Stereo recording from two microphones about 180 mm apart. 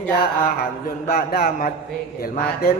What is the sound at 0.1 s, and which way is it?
Mantra, 60° left (ahead or behind).